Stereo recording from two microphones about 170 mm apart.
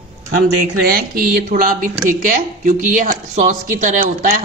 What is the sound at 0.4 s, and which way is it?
Speech, 60° right (ahead or behind).